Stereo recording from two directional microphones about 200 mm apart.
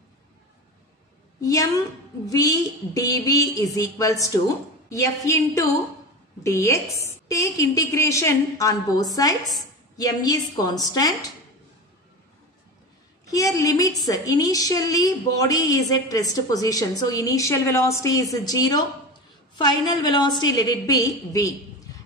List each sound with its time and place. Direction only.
1.4 s a woman's voice: 15° left (ahead or behind)
13.3 s a woman's voice: 15° left (ahead or behind)